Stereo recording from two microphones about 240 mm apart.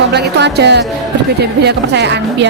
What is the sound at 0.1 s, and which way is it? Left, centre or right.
A woman's voice, right.